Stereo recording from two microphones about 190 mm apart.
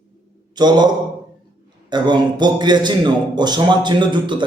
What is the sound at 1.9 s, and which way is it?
A man's voice, 25° right (ahead or behind).